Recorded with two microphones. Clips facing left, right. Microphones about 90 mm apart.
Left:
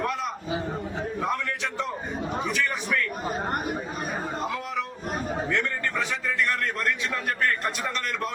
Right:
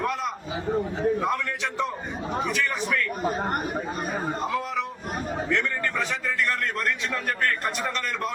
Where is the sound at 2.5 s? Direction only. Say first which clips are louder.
Even; centre (ahead or behind).